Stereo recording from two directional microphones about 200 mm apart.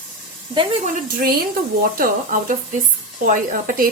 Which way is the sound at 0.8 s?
45° right (ahead or behind).